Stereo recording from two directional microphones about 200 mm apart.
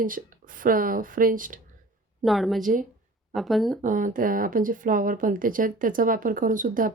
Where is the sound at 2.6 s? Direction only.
40° right (ahead or behind).